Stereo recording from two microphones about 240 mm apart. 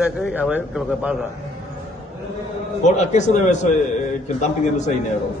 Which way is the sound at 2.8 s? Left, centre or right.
Left.